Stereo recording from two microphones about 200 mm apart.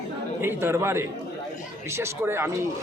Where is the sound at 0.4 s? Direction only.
10° right (ahead or behind).